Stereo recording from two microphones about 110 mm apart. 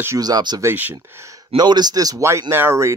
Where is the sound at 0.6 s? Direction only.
20° right (ahead or behind).